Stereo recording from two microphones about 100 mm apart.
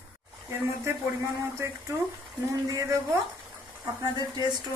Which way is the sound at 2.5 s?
35° right (ahead or behind).